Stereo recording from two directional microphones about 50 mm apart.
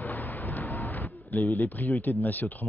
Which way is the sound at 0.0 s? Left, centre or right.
Left.